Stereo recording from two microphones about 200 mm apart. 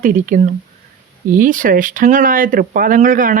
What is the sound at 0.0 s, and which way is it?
Speech, 40° right (ahead or behind).